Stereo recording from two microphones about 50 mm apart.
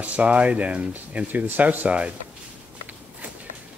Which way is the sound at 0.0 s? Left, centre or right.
Right.